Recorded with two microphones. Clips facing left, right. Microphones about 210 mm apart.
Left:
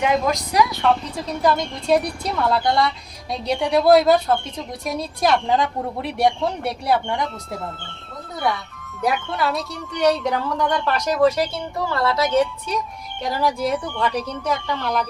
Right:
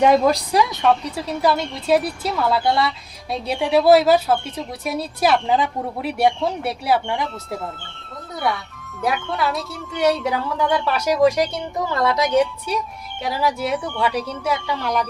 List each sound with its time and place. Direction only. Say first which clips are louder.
0.0 s a woman's voice: right 5 dB; 35° right (ahead or behind)
1.1 s speech: even; 10° right (ahead or behind)
9.0 s speech: even; centre (ahead or behind)